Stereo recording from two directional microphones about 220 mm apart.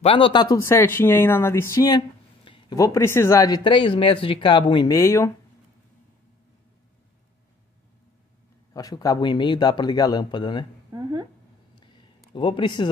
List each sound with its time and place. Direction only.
0.0 s speech: 25° left (ahead or behind)
8.7 s speech: 15° left (ahead or behind)
10.9 s a sound: 15° right (ahead or behind)
12.4 s speech: 20° left (ahead or behind)